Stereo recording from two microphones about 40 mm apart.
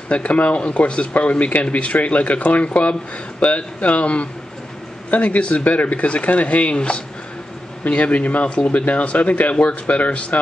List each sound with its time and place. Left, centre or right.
0.1 s speech: left